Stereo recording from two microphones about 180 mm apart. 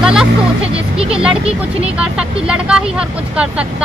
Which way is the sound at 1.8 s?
5° right (ahead or behind).